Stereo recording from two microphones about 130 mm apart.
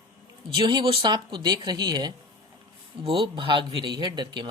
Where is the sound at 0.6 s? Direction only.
35° right (ahead or behind).